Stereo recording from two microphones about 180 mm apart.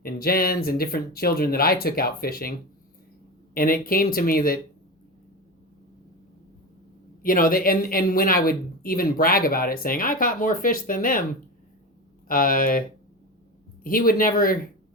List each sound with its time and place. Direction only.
0.0 s a woman's voice: 55° left (ahead or behind)
7.2 s a woman's voice: 50° left (ahead or behind)
12.3 s a woman's voice: 50° left (ahead or behind)
13.8 s a woman's voice: 55° left (ahead or behind)